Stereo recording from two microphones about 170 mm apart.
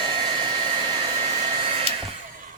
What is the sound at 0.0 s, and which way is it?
Hair dryer, 30° right (ahead or behind).